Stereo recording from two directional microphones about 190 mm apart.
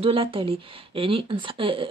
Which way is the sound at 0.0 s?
30° right (ahead or behind).